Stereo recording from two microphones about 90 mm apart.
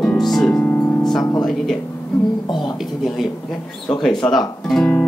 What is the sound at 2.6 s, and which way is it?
Speech, centre (ahead or behind).